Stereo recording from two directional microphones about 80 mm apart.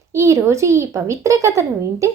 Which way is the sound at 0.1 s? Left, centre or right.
Right.